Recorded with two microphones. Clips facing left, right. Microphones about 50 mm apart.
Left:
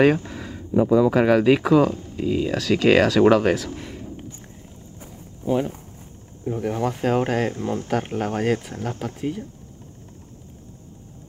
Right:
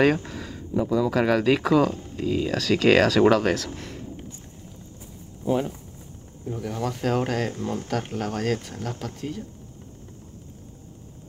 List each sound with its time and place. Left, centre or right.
0.3 s a sound: centre
0.8 s speech: left
6.4 s speech: left